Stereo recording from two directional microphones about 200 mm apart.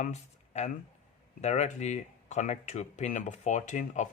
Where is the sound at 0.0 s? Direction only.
35° left (ahead or behind).